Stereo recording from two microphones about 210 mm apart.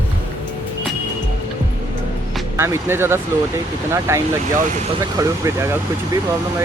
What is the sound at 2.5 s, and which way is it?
Speech, 10° right (ahead or behind).